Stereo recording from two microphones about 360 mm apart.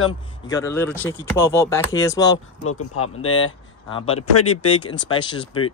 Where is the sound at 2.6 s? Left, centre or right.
Left.